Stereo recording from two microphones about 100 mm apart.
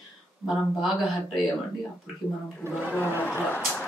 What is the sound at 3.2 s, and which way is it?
Speech, 15° left (ahead or behind).